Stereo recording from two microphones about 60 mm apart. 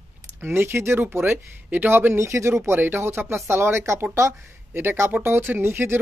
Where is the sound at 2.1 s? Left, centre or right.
Right.